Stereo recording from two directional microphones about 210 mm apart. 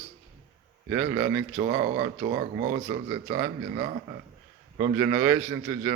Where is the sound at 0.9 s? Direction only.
20° right (ahead or behind).